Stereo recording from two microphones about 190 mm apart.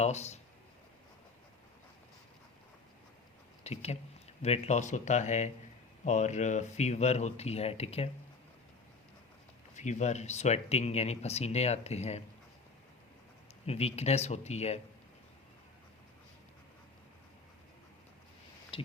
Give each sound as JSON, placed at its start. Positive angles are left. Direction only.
{"t": 0.0, "sound": "speech", "side_deg": 35}
{"t": 3.6, "sound": "speech", "side_deg": 35}
{"t": 9.7, "sound": "speech", "side_deg": 40}
{"t": 13.7, "sound": "speech", "side_deg": 35}
{"t": 18.7, "sound": "a sound", "side_deg": 30}